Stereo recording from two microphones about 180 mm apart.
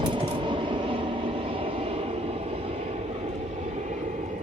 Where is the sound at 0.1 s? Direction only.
25° right (ahead or behind).